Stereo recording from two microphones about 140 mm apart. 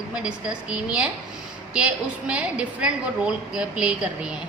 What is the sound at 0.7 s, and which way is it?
A woman's voice, 5° right (ahead or behind).